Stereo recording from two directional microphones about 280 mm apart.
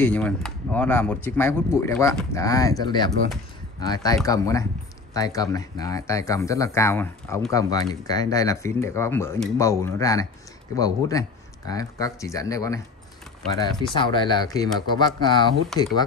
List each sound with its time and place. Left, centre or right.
0.0 s speech: centre
13.9 s speech: centre
15.7 s speech: centre